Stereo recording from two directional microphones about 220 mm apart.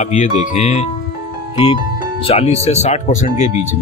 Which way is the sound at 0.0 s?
35° left (ahead or behind).